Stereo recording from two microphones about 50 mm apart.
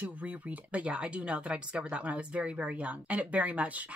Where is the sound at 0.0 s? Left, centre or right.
Right.